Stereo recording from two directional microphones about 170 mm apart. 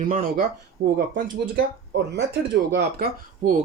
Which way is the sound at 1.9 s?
90° right.